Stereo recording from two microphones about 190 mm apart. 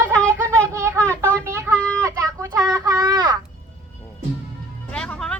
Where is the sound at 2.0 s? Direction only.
15° right (ahead or behind).